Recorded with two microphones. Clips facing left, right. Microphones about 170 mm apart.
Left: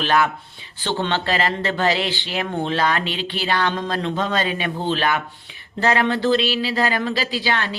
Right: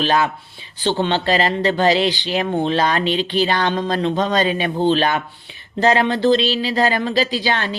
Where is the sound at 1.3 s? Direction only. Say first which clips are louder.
Right 4 dB; 20° right (ahead or behind).